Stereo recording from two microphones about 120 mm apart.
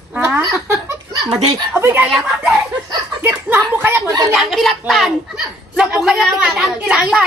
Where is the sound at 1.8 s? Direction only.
20° right (ahead or behind).